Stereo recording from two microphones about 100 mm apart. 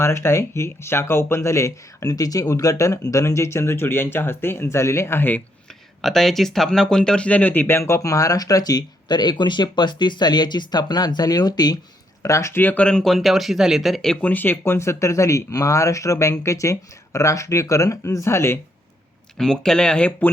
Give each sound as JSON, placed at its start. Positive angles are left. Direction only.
{"t": 0.0, "sound": "speech", "side_deg": 25}
{"t": 6.0, "sound": "speech", "side_deg": 5}
{"t": 12.2, "sound": "speech", "side_deg": 30}
{"t": 14.2, "sound": "speech", "side_deg": 15}
{"t": 19.4, "sound": "speech", "side_deg": 5}